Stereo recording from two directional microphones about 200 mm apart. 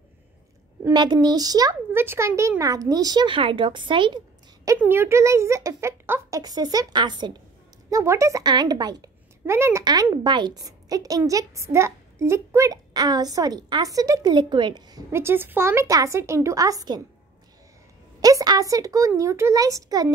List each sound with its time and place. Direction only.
0.8 s speech: 20° right (ahead or behind)
4.6 s a woman's voice: 10° right (ahead or behind)
18.2 s a woman's voice: 20° right (ahead or behind)